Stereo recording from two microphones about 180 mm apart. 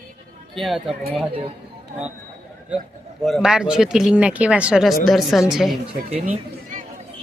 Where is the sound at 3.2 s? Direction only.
Centre (ahead or behind).